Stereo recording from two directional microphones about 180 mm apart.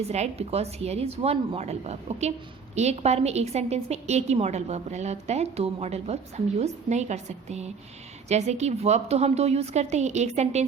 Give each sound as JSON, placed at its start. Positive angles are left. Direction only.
{"t": 0.1, "sound": "a woman's voice", "side_deg": -35}